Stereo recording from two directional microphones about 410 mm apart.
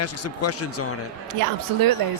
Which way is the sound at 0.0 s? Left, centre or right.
Left.